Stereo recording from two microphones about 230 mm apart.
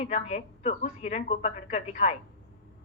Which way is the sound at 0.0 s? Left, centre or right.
Left.